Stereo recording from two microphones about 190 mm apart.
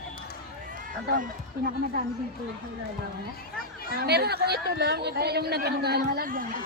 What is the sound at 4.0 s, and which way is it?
Speech, 60° right (ahead or behind).